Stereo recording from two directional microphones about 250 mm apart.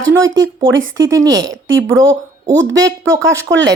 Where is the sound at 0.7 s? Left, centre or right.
Right.